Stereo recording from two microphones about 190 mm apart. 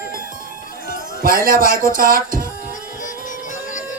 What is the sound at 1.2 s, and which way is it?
A man's voice, 50° right (ahead or behind).